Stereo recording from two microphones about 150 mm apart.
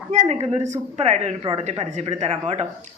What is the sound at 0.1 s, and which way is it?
Speech, 50° right (ahead or behind).